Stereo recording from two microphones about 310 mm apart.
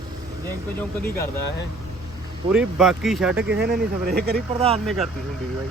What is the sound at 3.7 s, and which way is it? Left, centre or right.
Speech, right.